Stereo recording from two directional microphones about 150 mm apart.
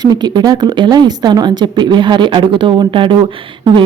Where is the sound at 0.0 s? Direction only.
30° right (ahead or behind).